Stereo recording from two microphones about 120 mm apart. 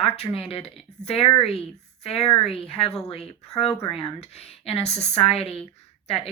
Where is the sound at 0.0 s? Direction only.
55° left (ahead or behind).